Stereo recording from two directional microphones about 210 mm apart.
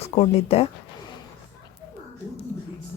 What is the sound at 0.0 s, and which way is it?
Speech, 30° left (ahead or behind).